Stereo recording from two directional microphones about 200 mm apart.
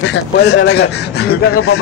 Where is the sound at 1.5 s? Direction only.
90° left.